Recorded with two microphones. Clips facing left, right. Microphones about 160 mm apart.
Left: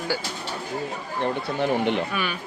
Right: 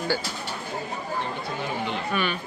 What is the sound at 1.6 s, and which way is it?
Speech, 65° left (ahead or behind).